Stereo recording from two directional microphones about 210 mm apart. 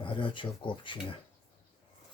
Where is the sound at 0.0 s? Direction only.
25° left (ahead or behind).